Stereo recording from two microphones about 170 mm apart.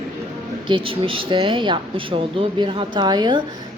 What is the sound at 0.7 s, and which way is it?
A woman's voice, 30° right (ahead or behind).